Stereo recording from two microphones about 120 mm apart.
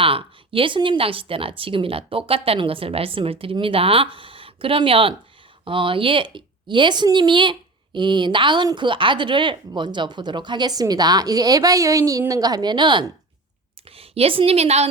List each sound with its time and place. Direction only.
0.0 s speech: 50° right (ahead or behind)
13.8 s a woman's voice: 55° right (ahead or behind)